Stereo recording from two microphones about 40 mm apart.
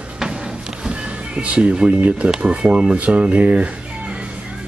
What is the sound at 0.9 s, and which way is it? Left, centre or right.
Music, right.